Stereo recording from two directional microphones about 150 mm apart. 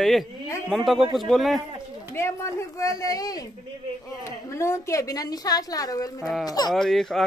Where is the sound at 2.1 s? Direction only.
20° left (ahead or behind).